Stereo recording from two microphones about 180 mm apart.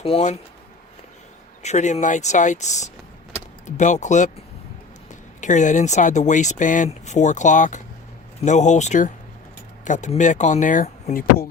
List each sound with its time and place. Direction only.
0.0 s speech: 35° left (ahead or behind)
1.6 s speech: 40° left (ahead or behind)
5.4 s speech: 45° left (ahead or behind)